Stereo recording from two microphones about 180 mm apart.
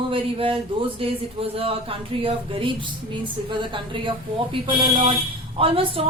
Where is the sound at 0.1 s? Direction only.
30° right (ahead or behind).